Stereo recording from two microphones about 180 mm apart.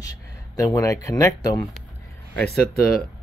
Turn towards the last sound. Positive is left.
turn(degrees=55)  # may be behind; listen again after turning